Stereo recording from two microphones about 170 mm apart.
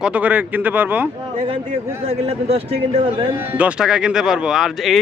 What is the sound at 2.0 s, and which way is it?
Speech, 35° right (ahead or behind).